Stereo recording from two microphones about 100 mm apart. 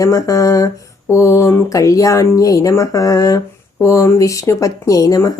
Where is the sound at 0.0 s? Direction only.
30° left (ahead or behind).